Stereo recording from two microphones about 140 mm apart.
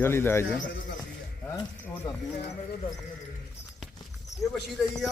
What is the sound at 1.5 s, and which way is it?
Speech, 30° left (ahead or behind).